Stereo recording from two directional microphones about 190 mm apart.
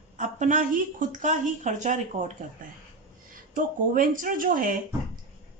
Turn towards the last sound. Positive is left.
turn(degrees=-45)  # may be behind; listen again after turning